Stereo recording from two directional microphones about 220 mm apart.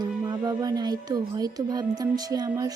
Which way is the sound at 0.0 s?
20° right (ahead or behind).